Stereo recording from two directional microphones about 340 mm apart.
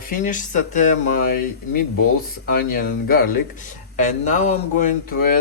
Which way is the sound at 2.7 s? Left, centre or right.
Left.